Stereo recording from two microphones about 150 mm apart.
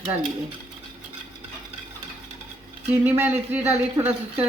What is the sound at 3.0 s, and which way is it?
Speech, 10° right (ahead or behind).